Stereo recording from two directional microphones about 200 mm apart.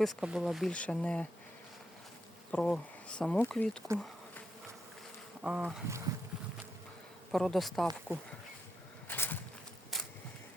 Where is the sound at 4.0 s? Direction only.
5° left (ahead or behind).